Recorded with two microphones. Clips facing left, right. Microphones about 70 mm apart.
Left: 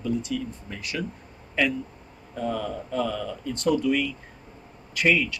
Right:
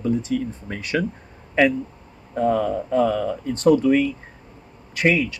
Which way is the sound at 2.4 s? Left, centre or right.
Right.